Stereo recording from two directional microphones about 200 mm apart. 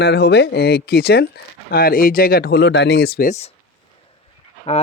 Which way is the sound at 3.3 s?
30° left (ahead or behind).